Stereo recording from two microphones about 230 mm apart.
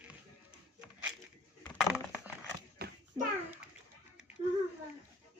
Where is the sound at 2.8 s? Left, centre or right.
Right.